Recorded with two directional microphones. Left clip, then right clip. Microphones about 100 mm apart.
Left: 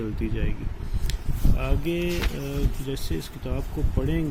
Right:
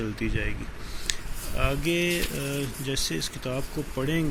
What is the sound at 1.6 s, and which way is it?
Speech, 15° left (ahead or behind).